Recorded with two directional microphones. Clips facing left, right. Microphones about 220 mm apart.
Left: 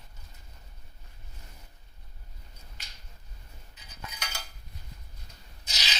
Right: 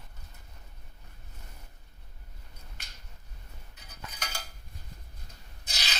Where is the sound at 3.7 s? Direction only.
55° right (ahead or behind).